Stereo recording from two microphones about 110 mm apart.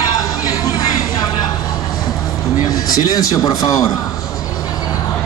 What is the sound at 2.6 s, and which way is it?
A man's voice, 35° left (ahead or behind).